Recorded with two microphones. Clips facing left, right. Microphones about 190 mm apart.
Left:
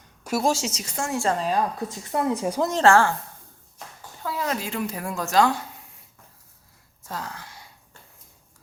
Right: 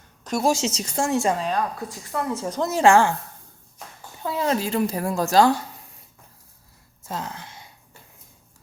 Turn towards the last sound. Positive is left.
turn(degrees=-20)  # may be behind; listen again after turning